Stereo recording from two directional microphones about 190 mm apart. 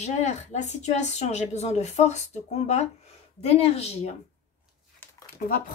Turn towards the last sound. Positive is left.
turn(degrees=45)  # may be behind; listen again after turning